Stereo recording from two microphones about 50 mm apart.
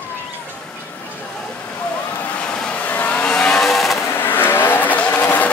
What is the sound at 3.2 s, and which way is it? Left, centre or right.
Vehicle, centre.